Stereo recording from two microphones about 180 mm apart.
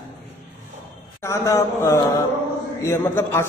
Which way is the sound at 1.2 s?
15° left (ahead or behind).